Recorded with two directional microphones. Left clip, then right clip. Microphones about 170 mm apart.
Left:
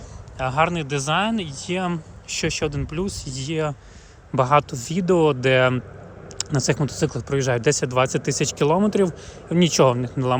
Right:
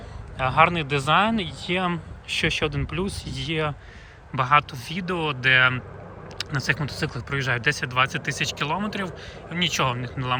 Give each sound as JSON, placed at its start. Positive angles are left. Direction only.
{"t": 0.3, "sound": "speech", "side_deg": 20}
{"t": 4.3, "sound": "speech", "side_deg": 35}